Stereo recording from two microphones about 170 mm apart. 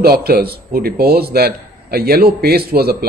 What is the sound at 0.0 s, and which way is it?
A man's voice, 65° right (ahead or behind).